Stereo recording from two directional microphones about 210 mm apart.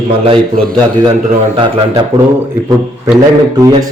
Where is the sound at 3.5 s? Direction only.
15° right (ahead or behind).